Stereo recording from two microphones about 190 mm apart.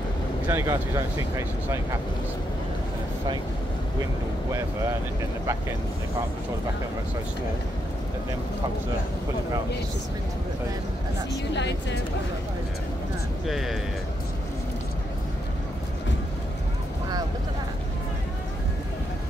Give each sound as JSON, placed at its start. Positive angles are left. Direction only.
{"t": 0.5, "sound": "speech", "side_deg": -15}
{"t": 11.5, "sound": "speech", "side_deg": 65}
{"t": 13.5, "sound": "speech", "side_deg": 0}